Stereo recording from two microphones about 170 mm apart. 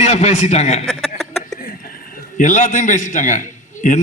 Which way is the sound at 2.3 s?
45° left (ahead or behind).